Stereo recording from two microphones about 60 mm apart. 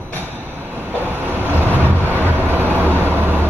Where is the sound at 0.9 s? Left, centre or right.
Right.